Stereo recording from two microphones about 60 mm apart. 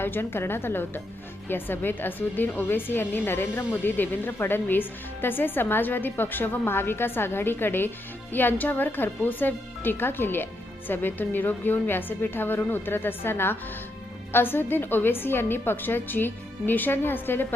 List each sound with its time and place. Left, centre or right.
0.0 s a woman's voice: left